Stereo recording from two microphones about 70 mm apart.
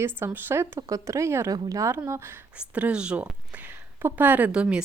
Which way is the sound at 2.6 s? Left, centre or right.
Centre.